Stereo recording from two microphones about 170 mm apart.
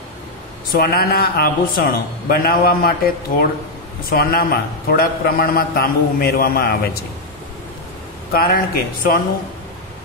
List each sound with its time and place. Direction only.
0.7 s a man's voice: 60° left (ahead or behind)
4.1 s a man's voice: 60° left (ahead or behind)
8.3 s a man's voice: 60° left (ahead or behind)